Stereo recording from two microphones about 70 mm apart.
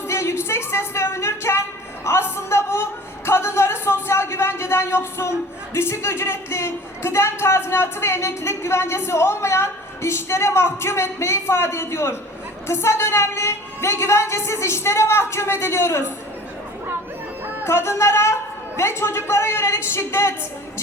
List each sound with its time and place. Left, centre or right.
0.1 s music: left
2.0 s a sound: left
5.7 s speech: left
17.6 s speech: left